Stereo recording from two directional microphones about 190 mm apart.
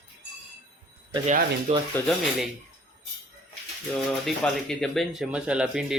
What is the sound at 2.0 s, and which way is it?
Speech, 10° left (ahead or behind).